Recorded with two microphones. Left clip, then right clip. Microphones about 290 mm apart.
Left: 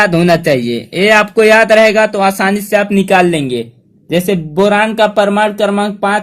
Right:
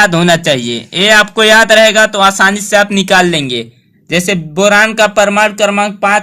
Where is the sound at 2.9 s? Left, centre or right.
Right.